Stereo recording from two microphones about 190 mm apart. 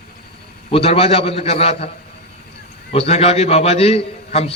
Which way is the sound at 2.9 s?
35° left (ahead or behind).